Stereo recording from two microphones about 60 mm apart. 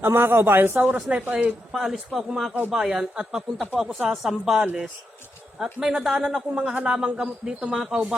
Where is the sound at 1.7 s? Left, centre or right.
Centre.